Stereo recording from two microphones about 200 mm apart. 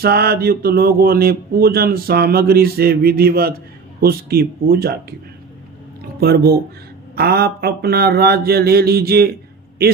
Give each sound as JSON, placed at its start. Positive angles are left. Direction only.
{"t": 0.0, "sound": "speech", "side_deg": -50}
{"t": 6.1, "sound": "speech", "side_deg": -50}